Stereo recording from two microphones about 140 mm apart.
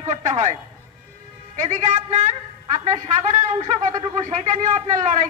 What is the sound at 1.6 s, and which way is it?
A man's voice, 60° right (ahead or behind).